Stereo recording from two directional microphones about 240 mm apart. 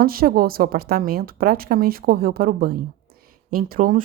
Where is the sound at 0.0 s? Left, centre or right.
Right.